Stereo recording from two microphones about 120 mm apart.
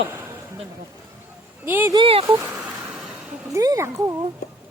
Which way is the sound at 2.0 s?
55° right (ahead or behind).